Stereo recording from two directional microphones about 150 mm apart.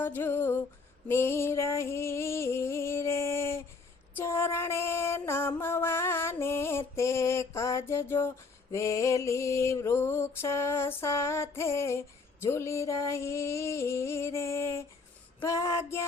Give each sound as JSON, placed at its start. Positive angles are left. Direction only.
{"t": 0.0, "sound": "music", "side_deg": 15}
{"t": 1.0, "sound": "a sound", "side_deg": 15}
{"t": 4.2, "sound": "music", "side_deg": 15}
{"t": 8.7, "sound": "mantra", "side_deg": 20}